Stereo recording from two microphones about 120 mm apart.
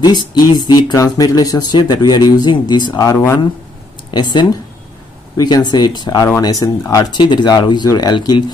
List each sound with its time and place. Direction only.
0.0 s speech: 35° left (ahead or behind)
4.1 s speech: 40° left (ahead or behind)